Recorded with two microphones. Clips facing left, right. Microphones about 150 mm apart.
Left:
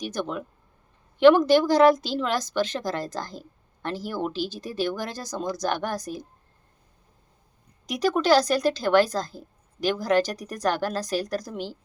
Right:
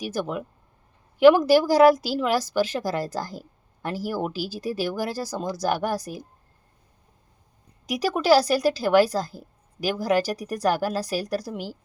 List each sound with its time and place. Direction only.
0.0 s speech: 5° right (ahead or behind)
7.9 s speech: 10° right (ahead or behind)